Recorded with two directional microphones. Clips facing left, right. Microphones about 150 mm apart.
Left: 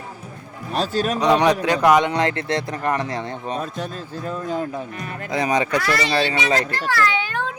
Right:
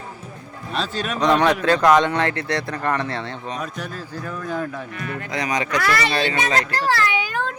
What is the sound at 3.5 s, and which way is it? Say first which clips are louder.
A man's voice: left 4 dB; 30° left (ahead or behind).